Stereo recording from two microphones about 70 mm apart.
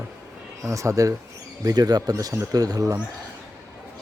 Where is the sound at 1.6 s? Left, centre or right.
Right.